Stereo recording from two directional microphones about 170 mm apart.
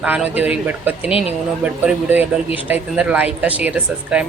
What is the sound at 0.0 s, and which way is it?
Speech, 10° right (ahead or behind).